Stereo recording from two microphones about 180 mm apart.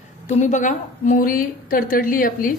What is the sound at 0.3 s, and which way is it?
A woman's voice, 40° left (ahead or behind).